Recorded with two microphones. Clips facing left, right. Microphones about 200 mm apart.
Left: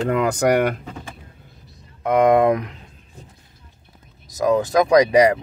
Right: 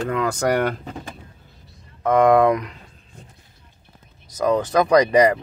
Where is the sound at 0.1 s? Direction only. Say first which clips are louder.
Left 3 dB; 20° left (ahead or behind).